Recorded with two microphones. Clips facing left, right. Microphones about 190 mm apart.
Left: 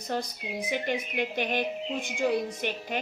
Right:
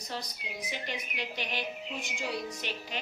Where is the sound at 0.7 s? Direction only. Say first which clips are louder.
Left 10 dB; 55° left (ahead or behind).